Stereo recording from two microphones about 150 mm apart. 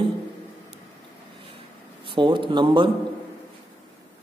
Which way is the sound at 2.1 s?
35° right (ahead or behind).